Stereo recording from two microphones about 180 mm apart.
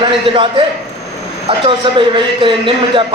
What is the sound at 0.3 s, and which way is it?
Speech, 30° right (ahead or behind).